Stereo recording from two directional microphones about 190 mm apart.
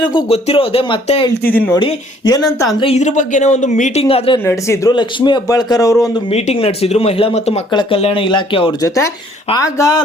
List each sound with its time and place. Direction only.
0.0 s a man's voice: 25° left (ahead or behind)
1.5 s speech: 10° left (ahead or behind)
1.7 s a man's voice: 20° left (ahead or behind)
2.7 s speech: 30° left (ahead or behind)
4.0 s a man's voice: 25° left (ahead or behind)
4.4 s a man's voice: 15° left (ahead or behind)
6.3 s a man's voice: 30° left (ahead or behind)